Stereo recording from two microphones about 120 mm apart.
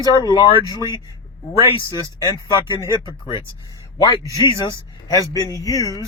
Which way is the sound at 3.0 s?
40° left (ahead or behind).